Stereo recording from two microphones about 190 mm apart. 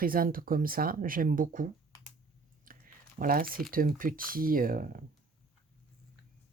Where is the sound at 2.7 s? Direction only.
45° right (ahead or behind).